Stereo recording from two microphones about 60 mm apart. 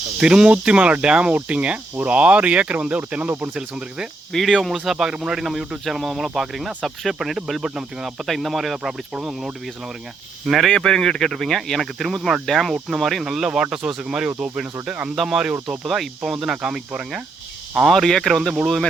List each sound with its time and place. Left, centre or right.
0.2 s speech: centre
4.3 s speech: centre
4.8 s speech: centre
10.4 s speech: centre
10.7 s speech: centre; by 15.1 s right
15.1 s speech: centre
15.9 s speech: centre
17.8 s speech: centre